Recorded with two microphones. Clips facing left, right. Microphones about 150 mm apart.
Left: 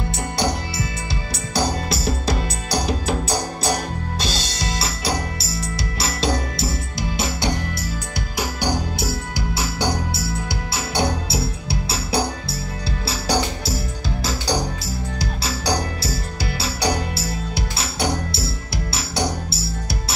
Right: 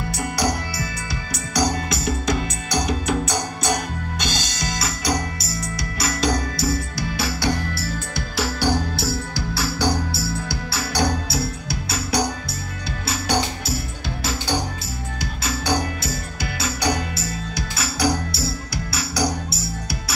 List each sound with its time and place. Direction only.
0.4 s music: 25° left (ahead or behind)
15.1 s music: 35° left (ahead or behind)